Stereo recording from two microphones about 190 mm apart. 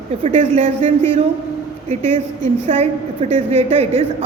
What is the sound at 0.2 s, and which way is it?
A woman's voice, 30° right (ahead or behind).